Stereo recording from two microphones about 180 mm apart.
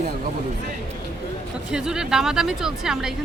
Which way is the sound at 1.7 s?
5° right (ahead or behind).